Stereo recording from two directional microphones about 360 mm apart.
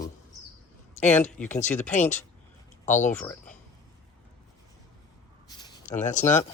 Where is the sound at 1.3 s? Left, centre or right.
Centre.